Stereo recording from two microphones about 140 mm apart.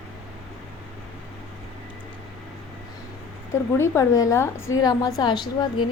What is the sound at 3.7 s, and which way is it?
A woman's voice, 20° left (ahead or behind).